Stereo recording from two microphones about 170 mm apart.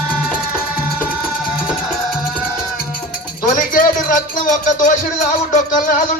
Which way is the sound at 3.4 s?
55° left (ahead or behind).